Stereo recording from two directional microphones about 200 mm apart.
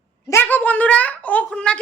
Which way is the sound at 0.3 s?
10° left (ahead or behind).